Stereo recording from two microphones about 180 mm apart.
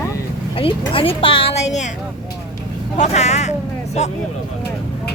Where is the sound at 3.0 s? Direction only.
40° left (ahead or behind).